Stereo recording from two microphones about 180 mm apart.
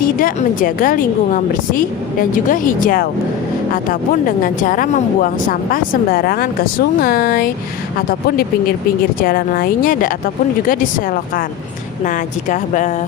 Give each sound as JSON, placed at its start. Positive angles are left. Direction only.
{"t": 0.0, "sound": "a woman's voice", "side_deg": 50}
{"t": 4.4, "sound": "a woman's voice", "side_deg": 50}